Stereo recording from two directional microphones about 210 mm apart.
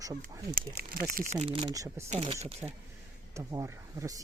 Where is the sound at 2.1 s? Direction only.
30° right (ahead or behind).